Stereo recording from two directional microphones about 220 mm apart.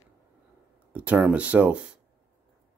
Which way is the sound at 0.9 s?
5° right (ahead or behind).